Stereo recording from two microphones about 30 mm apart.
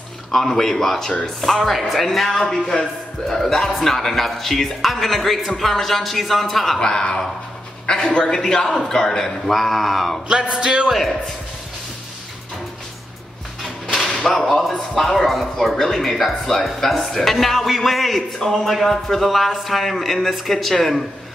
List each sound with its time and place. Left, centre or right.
0.3 s speech: centre
1.4 s speech: centre
6.8 s speech: left
7.8 s a sound: left
8.1 s a man's voice: left
8.6 s speech: centre
9.5 s speech: centre
10.3 s music: right
13.9 s speech: centre